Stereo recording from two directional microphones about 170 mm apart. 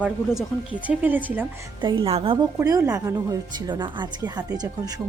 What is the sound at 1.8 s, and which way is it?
Speech, 30° right (ahead or behind).